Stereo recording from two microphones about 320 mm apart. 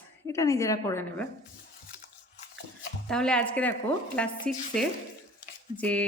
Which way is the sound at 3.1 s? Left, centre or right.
Centre.